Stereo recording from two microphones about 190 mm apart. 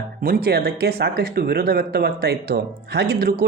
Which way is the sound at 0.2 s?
50° right (ahead or behind).